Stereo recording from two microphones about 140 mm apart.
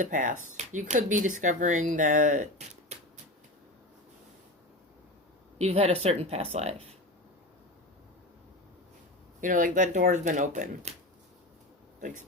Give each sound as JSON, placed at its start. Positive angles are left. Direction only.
{"t": 0.0, "sound": "speech", "side_deg": -70}
{"t": 5.5, "sound": "speech", "side_deg": -50}
{"t": 9.4, "sound": "speech", "side_deg": -70}